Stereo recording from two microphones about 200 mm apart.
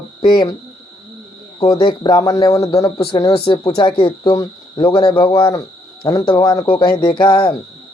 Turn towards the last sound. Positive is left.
turn(degrees=20)  # may be behind; listen again after turning